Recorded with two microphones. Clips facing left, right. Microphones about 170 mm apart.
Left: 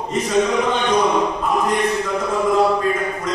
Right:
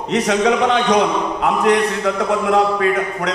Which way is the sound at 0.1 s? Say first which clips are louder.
Right 3 dB; 75° right (ahead or behind).